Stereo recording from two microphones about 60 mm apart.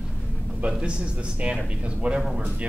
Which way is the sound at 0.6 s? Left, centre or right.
Centre.